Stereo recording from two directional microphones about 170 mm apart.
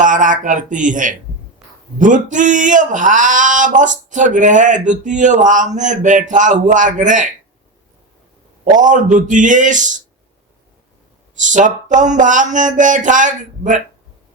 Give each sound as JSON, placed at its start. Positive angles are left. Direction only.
{"t": 0.0, "sound": "speech", "side_deg": -50}
{"t": 8.7, "sound": "speech", "side_deg": -50}
{"t": 11.3, "sound": "speech", "side_deg": -45}